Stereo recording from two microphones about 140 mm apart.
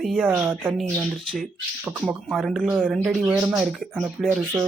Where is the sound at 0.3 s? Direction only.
15° right (ahead or behind).